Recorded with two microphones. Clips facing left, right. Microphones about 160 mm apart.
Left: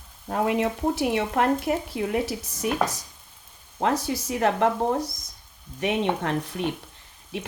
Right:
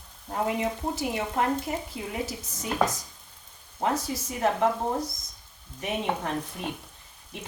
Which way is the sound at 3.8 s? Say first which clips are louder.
Left 3 dB; 80° left.